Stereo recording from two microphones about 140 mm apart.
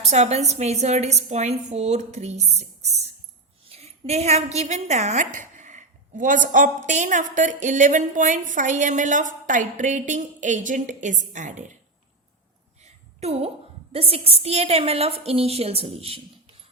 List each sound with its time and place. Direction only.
0.1 s a woman's voice: 50° right (ahead or behind)
12.8 s a sound: 50° right (ahead or behind)
13.9 s a woman's voice: 45° right (ahead or behind)